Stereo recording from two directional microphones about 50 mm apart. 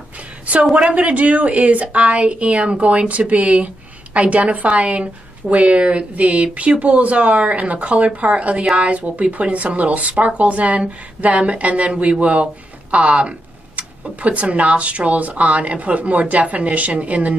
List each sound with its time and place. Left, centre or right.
0.8 s speech: right